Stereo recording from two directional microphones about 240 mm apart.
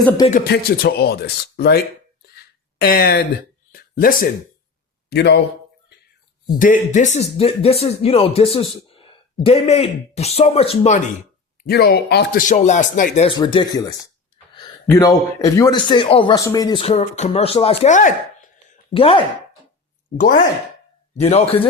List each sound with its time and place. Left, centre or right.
0.3 s speech: left
2.8 s speech: left
3.7 s a sound: left
5.0 s a man's voice: left
6.6 s speech: left
11.7 s speech: left; by 13.8 s centre
14.5 s a sound: centre
15.5 s speech: centre
20.1 s speech: left
21.1 s speech: left